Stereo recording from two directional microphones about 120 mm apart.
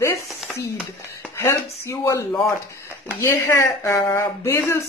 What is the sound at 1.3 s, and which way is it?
Speech, 25° left (ahead or behind).